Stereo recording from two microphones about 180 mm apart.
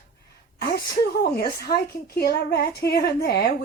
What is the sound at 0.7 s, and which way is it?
A woman's voice, 60° left (ahead or behind).